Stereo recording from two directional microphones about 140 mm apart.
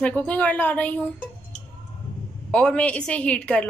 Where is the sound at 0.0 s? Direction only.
10° left (ahead or behind).